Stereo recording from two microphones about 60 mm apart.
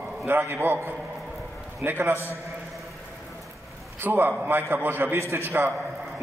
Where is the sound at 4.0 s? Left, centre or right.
Right.